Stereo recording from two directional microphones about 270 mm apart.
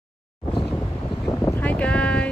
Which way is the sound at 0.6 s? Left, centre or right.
Centre.